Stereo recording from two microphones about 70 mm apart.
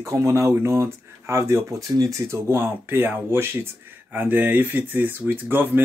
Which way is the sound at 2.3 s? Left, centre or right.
Right.